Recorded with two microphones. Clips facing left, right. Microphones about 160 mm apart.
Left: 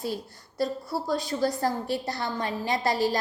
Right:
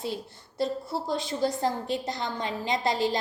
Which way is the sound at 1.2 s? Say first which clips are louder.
Left 1 dB; 20° right (ahead or behind).